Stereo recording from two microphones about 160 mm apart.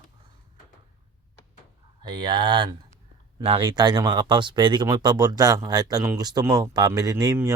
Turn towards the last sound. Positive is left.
turn(degrees=-20)  # may be behind; listen again after turning